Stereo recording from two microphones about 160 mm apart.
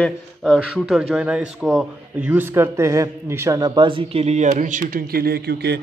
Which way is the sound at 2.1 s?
10° right (ahead or behind).